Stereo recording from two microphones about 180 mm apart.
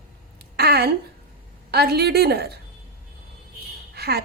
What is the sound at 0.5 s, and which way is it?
A woman's voice, 65° right (ahead or behind).